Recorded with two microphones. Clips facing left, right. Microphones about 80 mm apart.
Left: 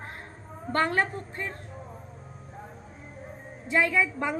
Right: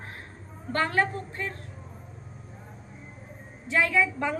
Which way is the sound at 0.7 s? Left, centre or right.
Left.